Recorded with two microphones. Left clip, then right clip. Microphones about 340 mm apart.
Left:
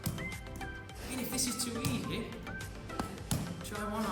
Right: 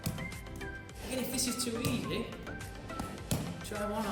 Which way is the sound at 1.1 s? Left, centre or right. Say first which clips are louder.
Right 2 dB; centre.